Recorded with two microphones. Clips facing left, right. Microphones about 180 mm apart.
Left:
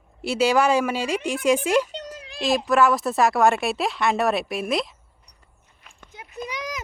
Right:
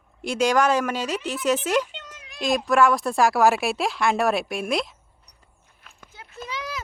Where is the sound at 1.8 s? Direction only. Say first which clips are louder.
Left 8 dB; 40° left (ahead or behind).